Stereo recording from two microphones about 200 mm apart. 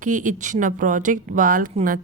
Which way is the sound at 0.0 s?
40° right (ahead or behind).